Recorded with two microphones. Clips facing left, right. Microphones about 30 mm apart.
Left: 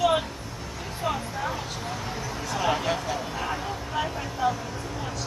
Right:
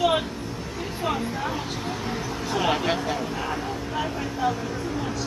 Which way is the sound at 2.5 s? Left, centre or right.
Right.